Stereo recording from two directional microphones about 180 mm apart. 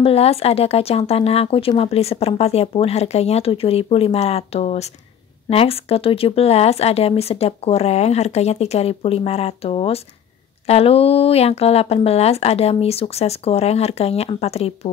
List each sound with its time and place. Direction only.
0.0 s speech: 35° left (ahead or behind)